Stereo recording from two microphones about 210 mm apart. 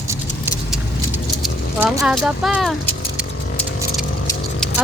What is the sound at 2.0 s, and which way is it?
Speech, 5° right (ahead or behind).